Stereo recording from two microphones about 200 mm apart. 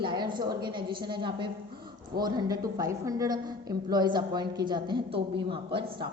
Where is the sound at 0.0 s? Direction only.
25° right (ahead or behind).